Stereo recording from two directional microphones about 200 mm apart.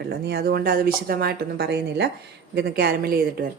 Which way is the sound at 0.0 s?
55° right (ahead or behind).